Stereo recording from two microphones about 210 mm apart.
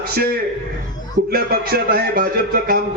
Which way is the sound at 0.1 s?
45° right (ahead or behind).